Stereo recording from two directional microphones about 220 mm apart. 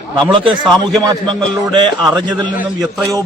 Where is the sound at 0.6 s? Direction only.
Centre (ahead or behind).